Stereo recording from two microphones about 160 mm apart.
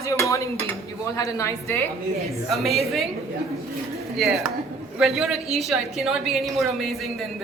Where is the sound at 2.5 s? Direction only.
Centre (ahead or behind).